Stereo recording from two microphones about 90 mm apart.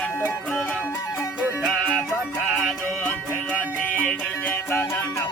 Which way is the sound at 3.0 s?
15° left (ahead or behind).